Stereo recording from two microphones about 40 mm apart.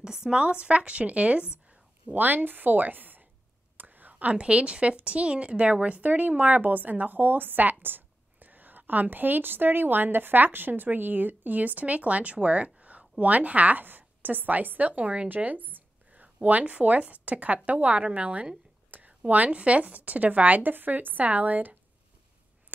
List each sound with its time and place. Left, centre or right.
0.0 s a sound: centre
0.4 s a woman's voice: right
2.1 s a woman's voice: right
3.7 s whispering: right
4.1 s a woman's voice: right